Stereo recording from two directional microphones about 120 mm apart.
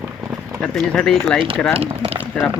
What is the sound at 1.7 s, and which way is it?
Speech, 55° right (ahead or behind).